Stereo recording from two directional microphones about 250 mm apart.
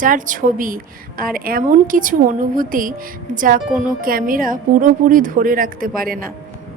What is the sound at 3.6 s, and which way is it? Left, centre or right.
Speech, centre.